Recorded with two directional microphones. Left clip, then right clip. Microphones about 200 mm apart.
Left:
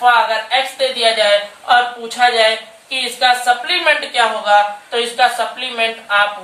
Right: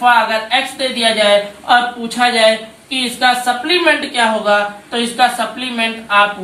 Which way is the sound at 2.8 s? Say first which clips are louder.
Even; 20° left (ahead or behind).